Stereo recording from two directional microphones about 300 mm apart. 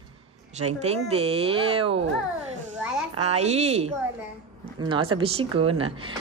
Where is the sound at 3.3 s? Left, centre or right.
Right.